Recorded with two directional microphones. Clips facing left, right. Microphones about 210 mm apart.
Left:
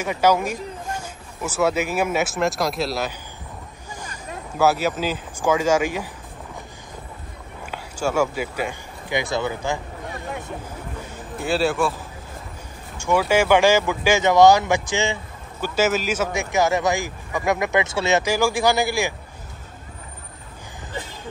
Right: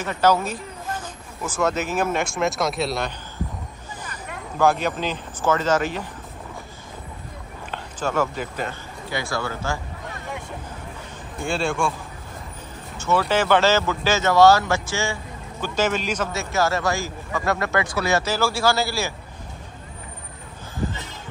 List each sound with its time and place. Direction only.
0.0 s speech: 10° left (ahead or behind)
4.6 s speech: 5° left (ahead or behind)
7.7 s speech: 10° left (ahead or behind)
11.3 s speech: 5° left (ahead or behind)
12.9 s speech: 10° left (ahead or behind)